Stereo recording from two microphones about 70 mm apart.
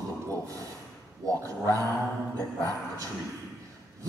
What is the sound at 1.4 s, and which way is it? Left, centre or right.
Dog, right.